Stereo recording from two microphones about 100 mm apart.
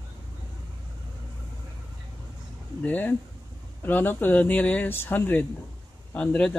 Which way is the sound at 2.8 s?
15° left (ahead or behind).